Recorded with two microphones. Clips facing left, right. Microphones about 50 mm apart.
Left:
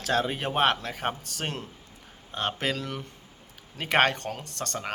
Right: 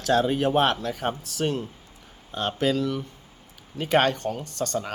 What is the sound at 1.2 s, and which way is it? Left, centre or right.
Speech, left.